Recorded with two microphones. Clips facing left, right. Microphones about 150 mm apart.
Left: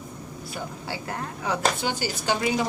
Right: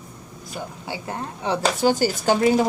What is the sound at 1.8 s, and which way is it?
Speech, 45° right (ahead or behind).